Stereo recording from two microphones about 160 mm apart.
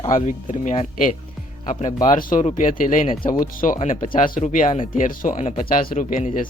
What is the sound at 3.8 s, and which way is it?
Speech, 45° left (ahead or behind).